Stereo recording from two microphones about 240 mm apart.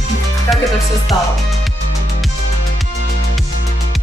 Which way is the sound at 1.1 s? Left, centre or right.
Centre.